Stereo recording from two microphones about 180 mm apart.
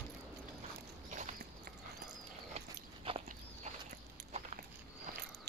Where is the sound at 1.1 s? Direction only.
45° right (ahead or behind).